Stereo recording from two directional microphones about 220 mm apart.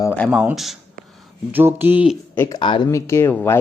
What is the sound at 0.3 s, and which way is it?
Speech, 5° right (ahead or behind).